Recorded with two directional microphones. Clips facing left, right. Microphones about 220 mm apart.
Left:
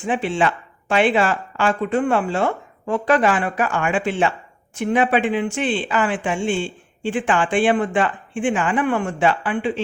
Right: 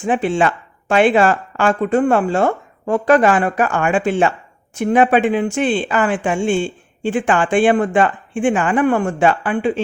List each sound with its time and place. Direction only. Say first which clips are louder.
0.0 s speech: right 4 dB; 45° right (ahead or behind)